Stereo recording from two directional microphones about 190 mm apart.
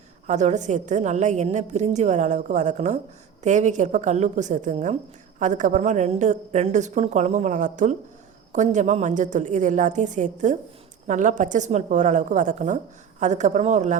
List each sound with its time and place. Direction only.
0.3 s a woman's voice: 40° right (ahead or behind)